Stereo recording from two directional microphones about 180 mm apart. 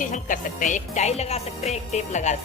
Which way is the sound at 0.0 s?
45° left (ahead or behind).